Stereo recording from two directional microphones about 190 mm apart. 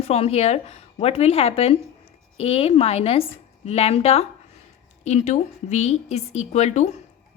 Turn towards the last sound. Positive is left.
turn(degrees=35)  # may be behind; listen again after turning